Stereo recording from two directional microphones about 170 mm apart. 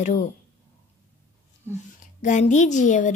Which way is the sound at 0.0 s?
45° left (ahead or behind).